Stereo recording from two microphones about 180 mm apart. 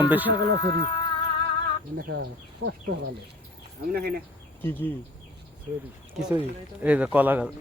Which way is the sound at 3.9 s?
60° right (ahead or behind).